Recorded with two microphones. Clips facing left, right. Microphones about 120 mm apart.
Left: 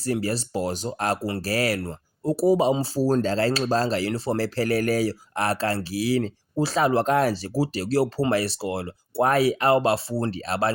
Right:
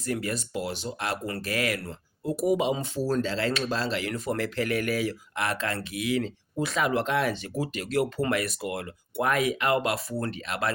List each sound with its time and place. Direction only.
0.0 s speech: 35° left (ahead or behind)